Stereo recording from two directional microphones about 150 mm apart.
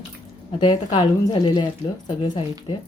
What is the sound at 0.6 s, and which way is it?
Speech, 35° left (ahead or behind).